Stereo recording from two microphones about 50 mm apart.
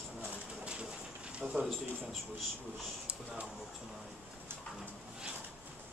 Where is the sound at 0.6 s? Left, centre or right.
Centre.